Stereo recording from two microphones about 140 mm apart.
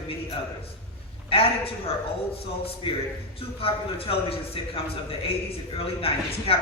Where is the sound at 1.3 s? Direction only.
40° left (ahead or behind).